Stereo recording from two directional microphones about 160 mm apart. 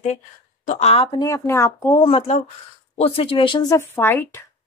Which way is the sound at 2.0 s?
35° left (ahead or behind).